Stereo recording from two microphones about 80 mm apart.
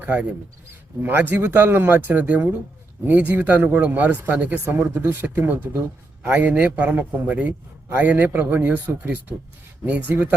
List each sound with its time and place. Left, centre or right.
0.0 s speech: centre
4.6 s speech: right